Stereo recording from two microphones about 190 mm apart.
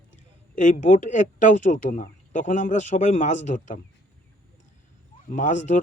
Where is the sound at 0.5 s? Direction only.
40° left (ahead or behind).